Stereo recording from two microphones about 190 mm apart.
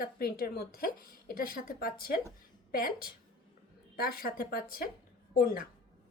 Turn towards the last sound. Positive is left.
turn(degrees=50)  # may be behind; listen again after turning